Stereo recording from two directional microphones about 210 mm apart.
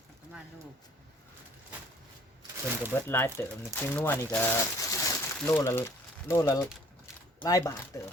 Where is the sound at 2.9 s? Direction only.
10° left (ahead or behind).